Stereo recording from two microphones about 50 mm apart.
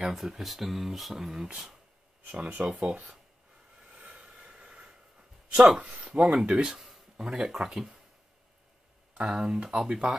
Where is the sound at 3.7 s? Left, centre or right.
Centre.